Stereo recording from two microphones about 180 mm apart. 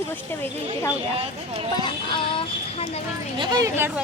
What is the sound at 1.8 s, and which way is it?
Speech, 25° left (ahead or behind).